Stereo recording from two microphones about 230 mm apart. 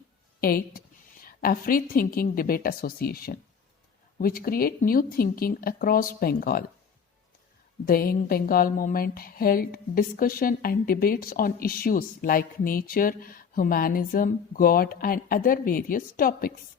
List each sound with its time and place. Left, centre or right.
0.3 s a woman's voice: left
7.9 s speech: left